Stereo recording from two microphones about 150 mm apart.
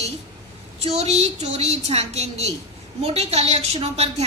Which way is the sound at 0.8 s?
45° right (ahead or behind).